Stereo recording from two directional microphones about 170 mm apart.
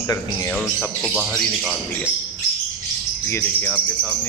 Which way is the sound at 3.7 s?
10° right (ahead or behind).